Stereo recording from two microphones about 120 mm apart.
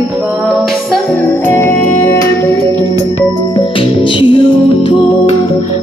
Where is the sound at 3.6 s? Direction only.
45° left (ahead or behind).